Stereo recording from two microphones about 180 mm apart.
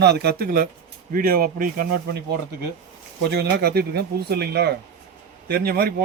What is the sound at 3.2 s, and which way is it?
Speech, 60° right (ahead or behind).